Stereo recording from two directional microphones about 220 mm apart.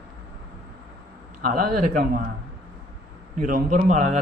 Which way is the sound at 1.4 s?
40° right (ahead or behind).